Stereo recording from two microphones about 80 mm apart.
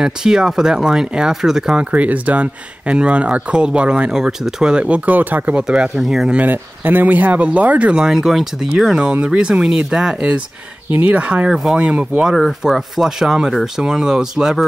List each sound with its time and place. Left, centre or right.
0.0 s speech: centre
1.9 s speech: centre
5.6 s speech: centre
6.3 s speech: right
10.9 s speech: centre
12.4 s speech: centre